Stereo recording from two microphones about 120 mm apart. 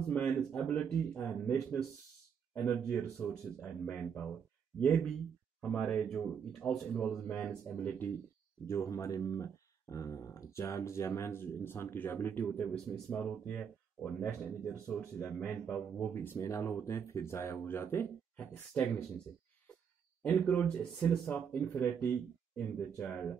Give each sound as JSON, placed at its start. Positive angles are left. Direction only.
{"t": 0.1, "sound": "speech", "side_deg": 10}
{"t": 2.8, "sound": "speech", "side_deg": 5}
{"t": 8.6, "sound": "speech", "side_deg": 25}
{"t": 14.7, "sound": "speech", "side_deg": 25}
{"t": 15.3, "sound": "speech", "side_deg": 10}
{"t": 20.2, "sound": "speech", "side_deg": 10}